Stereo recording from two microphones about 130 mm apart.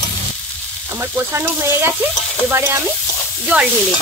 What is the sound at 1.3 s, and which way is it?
Speech, 20° right (ahead or behind).